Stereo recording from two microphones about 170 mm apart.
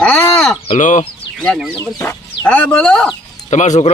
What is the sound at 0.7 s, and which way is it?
Speech, 45° left (ahead or behind).